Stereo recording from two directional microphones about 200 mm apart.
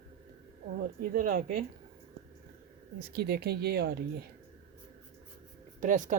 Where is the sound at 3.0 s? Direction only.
55° right (ahead or behind).